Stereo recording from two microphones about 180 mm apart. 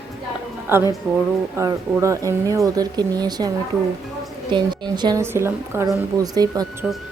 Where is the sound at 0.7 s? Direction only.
10° right (ahead or behind).